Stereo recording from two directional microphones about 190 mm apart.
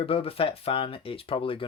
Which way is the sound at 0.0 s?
30° left (ahead or behind).